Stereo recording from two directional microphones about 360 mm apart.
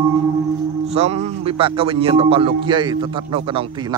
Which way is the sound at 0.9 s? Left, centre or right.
Centre.